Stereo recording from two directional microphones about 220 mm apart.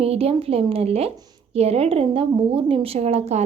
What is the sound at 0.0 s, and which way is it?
A woman's voice, 25° right (ahead or behind).